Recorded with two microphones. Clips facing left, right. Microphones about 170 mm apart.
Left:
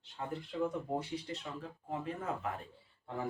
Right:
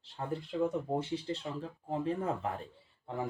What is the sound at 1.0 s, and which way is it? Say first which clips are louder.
Speech: right 4 dB; 30° right (ahead or behind).